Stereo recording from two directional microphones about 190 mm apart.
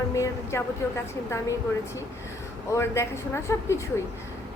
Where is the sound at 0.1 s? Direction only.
15° left (ahead or behind).